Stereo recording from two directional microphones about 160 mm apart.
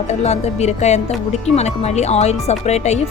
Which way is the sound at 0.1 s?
45° left (ahead or behind).